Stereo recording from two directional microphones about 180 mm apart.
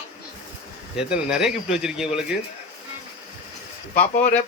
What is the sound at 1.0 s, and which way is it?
Speech, 5° right (ahead or behind).